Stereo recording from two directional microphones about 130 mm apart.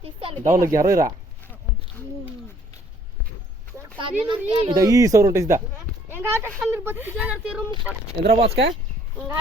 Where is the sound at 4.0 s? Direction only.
40° right (ahead or behind).